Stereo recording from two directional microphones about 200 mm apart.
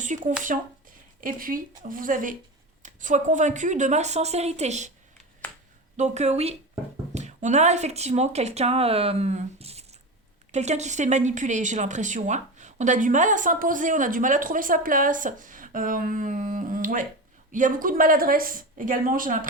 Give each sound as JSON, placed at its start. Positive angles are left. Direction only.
{"t": 0.1, "sound": "a woman's voice", "side_deg": -40}
{"t": 6.0, "sound": "a woman's voice", "side_deg": -35}